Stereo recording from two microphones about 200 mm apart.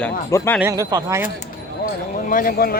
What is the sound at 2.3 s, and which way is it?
Speech, 45° left (ahead or behind).